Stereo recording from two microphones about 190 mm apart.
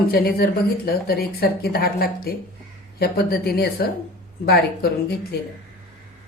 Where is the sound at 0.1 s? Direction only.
55° left (ahead or behind).